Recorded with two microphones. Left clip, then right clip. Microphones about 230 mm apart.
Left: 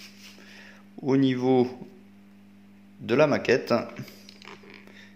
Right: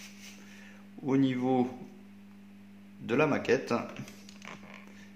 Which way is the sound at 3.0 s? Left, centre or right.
Left.